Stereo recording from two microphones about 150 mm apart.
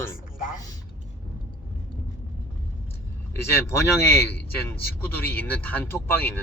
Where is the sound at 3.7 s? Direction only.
15° left (ahead or behind).